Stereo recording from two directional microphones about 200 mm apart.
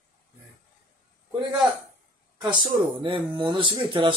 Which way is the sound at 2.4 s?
25° right (ahead or behind).